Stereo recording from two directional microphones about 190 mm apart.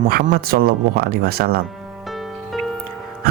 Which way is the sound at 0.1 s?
50° right (ahead or behind).